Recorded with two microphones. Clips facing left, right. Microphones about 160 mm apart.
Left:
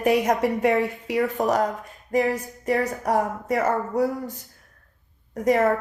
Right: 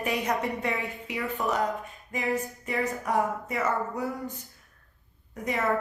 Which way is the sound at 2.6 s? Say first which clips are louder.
Left 8 dB; 40° left (ahead or behind).